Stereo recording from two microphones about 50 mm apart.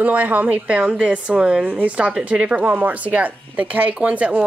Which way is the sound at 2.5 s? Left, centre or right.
Right.